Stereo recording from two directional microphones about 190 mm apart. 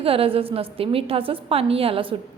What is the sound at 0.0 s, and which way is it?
A woman's voice, 30° right (ahead or behind).